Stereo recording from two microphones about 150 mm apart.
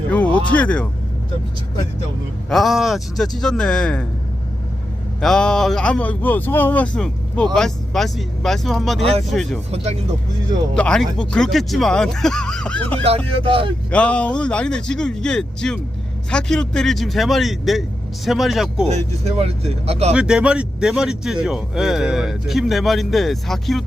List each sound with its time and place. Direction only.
0.1 s a sound: 10° left (ahead or behind)
2.5 s a man's voice: centre (ahead or behind)
5.2 s a man's voice: 5° left (ahead or behind)
9.7 s speech: 45° right (ahead or behind)
10.8 s a man's voice: 5° left (ahead or behind)
13.0 s speech: 40° right (ahead or behind)
13.9 s a man's voice: 10° left (ahead or behind)
18.9 s speech: 45° right (ahead or behind)
20.1 s a man's voice: 5° right (ahead or behind)